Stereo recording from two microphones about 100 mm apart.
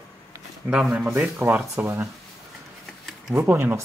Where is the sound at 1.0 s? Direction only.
20° right (ahead or behind).